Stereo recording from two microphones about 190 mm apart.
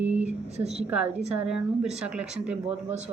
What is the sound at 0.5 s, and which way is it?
Speech, 35° right (ahead or behind).